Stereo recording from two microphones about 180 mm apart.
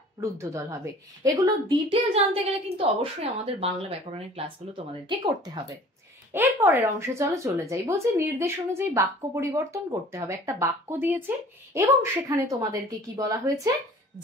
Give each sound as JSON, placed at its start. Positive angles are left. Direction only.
{"t": 0.2, "sound": "a woman's voice", "side_deg": -15}
{"t": 6.3, "sound": "a woman's voice", "side_deg": -10}